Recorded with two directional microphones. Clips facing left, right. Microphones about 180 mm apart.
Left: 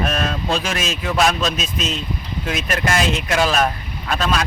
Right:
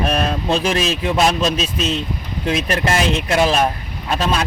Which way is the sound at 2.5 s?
30° right (ahead or behind).